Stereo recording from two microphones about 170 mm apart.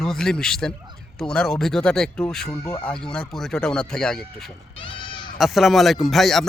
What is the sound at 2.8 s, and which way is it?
Speech, 5° left (ahead or behind).